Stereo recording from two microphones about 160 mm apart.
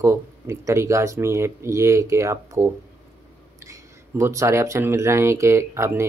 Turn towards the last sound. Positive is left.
turn(degrees=-15)  # may be behind; listen again after turning